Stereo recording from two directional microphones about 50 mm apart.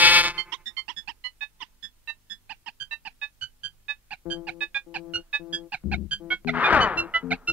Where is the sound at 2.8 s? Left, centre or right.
Right.